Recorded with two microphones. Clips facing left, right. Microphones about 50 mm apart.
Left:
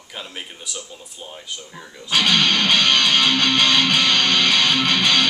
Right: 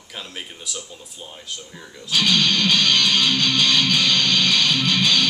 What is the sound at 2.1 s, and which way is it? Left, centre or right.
Music, left.